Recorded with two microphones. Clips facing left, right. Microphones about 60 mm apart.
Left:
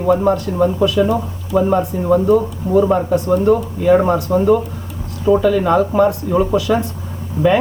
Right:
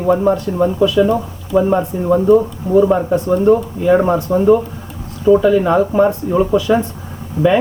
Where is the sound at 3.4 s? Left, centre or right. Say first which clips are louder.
Right 3 dB; centre.